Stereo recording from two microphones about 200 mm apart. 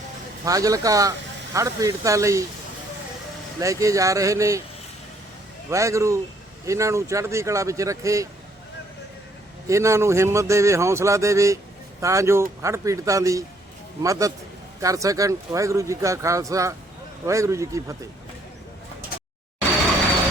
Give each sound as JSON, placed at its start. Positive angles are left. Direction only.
{"t": 0.4, "sound": "a man's voice", "side_deg": -15}
{"t": 3.6, "sound": "a man's voice", "side_deg": -15}
{"t": 5.7, "sound": "a man's voice", "side_deg": -15}
{"t": 9.6, "sound": "a man's voice", "side_deg": -15}